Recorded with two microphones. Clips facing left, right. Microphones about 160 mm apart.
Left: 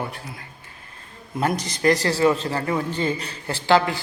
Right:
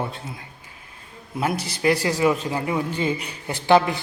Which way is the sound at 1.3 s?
5° right (ahead or behind).